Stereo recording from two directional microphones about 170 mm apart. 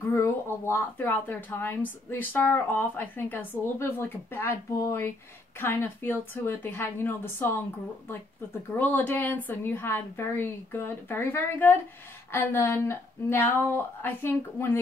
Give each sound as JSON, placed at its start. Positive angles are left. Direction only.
{"t": 0.1, "sound": "a woman's voice", "side_deg": 15}
{"t": 8.7, "sound": "a woman's voice", "side_deg": 10}